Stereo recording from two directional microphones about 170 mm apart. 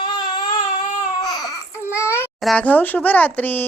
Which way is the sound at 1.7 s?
15° left (ahead or behind).